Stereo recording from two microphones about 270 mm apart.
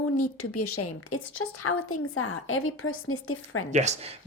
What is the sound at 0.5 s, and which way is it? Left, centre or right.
A woman's voice, left.